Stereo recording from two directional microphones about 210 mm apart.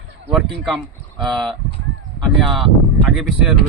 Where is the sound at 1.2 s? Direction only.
Centre (ahead or behind).